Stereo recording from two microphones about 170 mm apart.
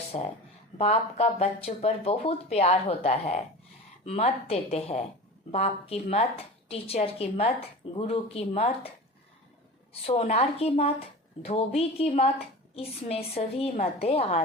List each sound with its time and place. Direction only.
0.1 s speech: 40° left (ahead or behind)
9.9 s speech: 40° left (ahead or behind)